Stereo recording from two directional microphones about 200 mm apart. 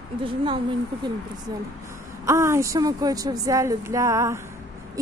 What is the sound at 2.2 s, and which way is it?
Speech, 15° right (ahead or behind).